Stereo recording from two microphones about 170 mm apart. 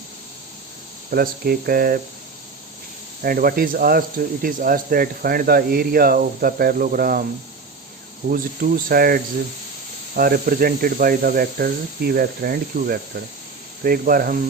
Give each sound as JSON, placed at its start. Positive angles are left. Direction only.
{"t": 1.1, "sound": "speech", "side_deg": -60}
{"t": 3.2, "sound": "speech", "side_deg": -60}
{"t": 8.3, "sound": "speech", "side_deg": -60}